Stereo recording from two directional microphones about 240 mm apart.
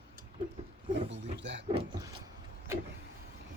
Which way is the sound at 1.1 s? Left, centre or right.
Right.